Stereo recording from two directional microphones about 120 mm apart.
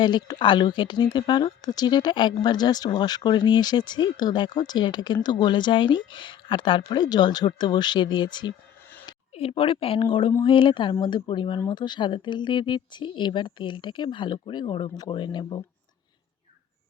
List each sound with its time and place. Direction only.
0.0 s speech: 35° left (ahead or behind)
9.3 s speech: 50° left (ahead or behind)